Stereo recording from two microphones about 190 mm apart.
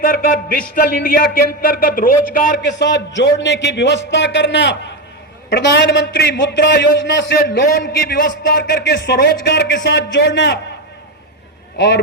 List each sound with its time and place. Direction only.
0.0 s speech: 50° left (ahead or behind)
2.6 s a man's voice: 65° left (ahead or behind)